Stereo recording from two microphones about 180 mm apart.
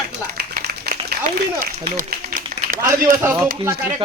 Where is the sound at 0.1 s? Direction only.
65° right (ahead or behind).